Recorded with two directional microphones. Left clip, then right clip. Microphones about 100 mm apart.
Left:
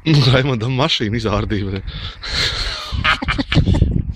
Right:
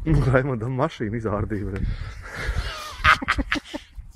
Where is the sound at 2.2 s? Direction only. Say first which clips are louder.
Left 13 dB; 15° left (ahead or behind).